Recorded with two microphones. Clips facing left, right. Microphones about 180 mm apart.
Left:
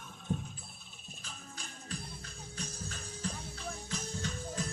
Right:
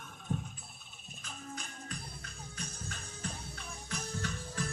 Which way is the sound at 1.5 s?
30° left (ahead or behind).